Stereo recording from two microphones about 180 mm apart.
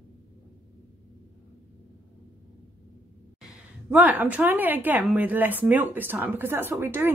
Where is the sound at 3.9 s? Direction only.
10° right (ahead or behind).